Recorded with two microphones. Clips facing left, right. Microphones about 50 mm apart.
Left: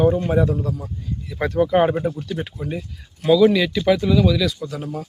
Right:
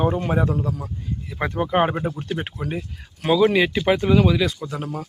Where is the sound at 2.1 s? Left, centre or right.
Right.